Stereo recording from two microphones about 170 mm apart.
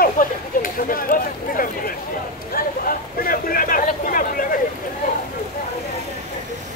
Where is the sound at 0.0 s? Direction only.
55° left (ahead or behind).